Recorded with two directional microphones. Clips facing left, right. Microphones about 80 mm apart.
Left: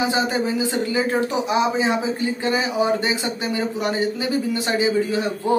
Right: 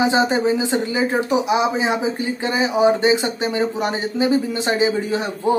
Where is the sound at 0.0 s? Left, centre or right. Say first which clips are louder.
Right 4 dB; right.